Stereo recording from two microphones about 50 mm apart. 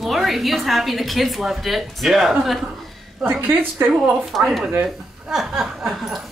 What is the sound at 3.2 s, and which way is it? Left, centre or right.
Speech, right.